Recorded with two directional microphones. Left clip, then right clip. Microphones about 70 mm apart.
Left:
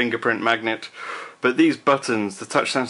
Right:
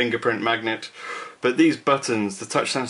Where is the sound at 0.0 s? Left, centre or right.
Left.